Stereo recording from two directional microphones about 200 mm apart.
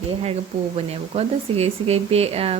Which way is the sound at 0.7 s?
30° right (ahead or behind).